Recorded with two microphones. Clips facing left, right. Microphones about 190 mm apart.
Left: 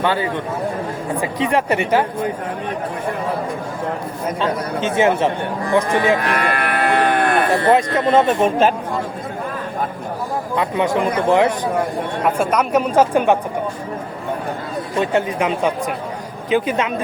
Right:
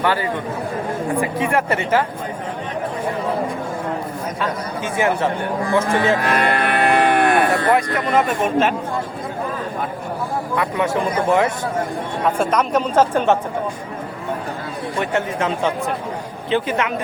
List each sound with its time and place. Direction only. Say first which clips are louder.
0.0 s speech: left 1 dB; 20° left (ahead or behind)
4.4 s speech: left 5 dB; 25° left (ahead or behind)
6.4 s music: right 2 dB; 25° right (ahead or behind)
7.5 s speech: left 3 dB; 25° left (ahead or behind)
10.5 s speech: left 2 dB; 20° left (ahead or behind)
12.4 s speech: left 1 dB; 10° left (ahead or behind)
14.9 s speech: left 3 dB; 15° left (ahead or behind)